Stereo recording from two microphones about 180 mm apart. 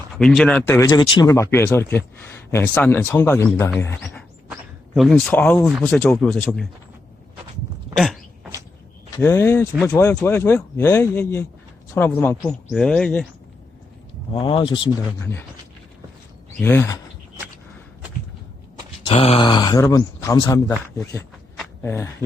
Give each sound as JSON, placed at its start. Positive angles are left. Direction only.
{"t": 0.1, "sound": "speech", "side_deg": 0}
{"t": 0.8, "sound": "speech", "side_deg": 20}
{"t": 4.9, "sound": "speech", "side_deg": 0}
{"t": 7.9, "sound": "a sound", "side_deg": 0}
{"t": 9.1, "sound": "speech", "side_deg": 15}
{"t": 14.3, "sound": "speech", "side_deg": 30}
{"t": 16.6, "sound": "speech", "side_deg": 15}
{"t": 19.0, "sound": "speech", "side_deg": 35}